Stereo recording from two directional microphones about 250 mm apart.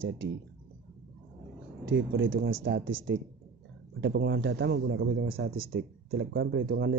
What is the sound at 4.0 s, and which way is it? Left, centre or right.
Speech, right.